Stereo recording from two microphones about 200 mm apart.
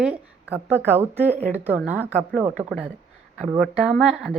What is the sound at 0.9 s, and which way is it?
Speech, 10° right (ahead or behind).